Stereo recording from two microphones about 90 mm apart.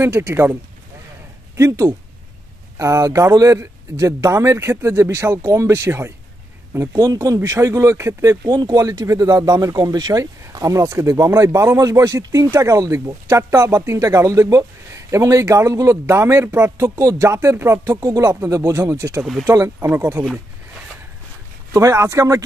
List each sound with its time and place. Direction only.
0.0 s speech: 25° right (ahead or behind)
1.6 s speech: 35° right (ahead or behind)
7.0 s speech: 40° right (ahead or behind)
21.7 s speech: 35° right (ahead or behind)